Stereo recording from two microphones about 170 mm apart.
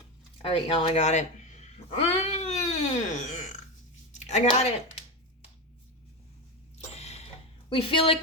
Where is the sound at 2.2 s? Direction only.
40° left (ahead or behind).